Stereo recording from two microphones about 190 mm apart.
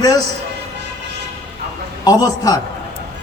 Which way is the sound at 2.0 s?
20° left (ahead or behind).